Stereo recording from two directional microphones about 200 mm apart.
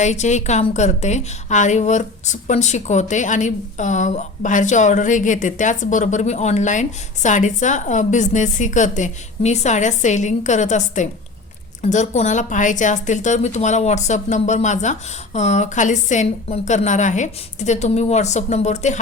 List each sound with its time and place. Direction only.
0.0 s a woman's voice: 35° left (ahead or behind)